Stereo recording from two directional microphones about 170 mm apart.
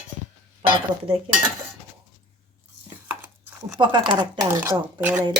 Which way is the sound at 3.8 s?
30° right (ahead or behind).